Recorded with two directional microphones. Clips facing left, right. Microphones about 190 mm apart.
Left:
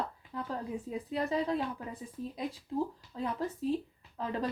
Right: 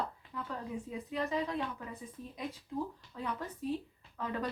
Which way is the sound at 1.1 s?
35° left (ahead or behind).